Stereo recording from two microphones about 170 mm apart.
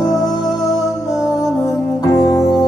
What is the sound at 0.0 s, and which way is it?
Music, 20° left (ahead or behind).